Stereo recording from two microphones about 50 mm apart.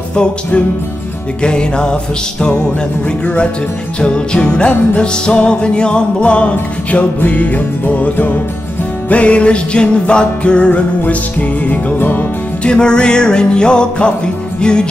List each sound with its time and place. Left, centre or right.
1.4 s music: centre
4.0 s music: centre; by 12.3 s left
12.6 s music: centre